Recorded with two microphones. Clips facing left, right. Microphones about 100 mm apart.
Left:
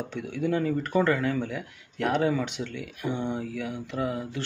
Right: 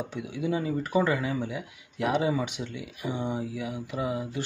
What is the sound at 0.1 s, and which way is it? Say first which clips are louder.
Speech: left 4 dB; 10° right (ahead or behind).